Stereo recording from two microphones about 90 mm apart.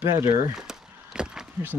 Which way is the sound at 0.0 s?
30° right (ahead or behind).